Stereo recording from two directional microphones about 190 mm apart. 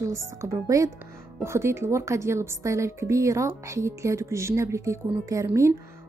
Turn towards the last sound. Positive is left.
turn(degrees=-15)  # may be behind; listen again after turning